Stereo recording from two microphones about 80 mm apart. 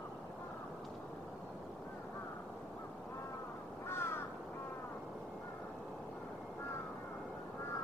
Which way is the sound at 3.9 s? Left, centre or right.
Left.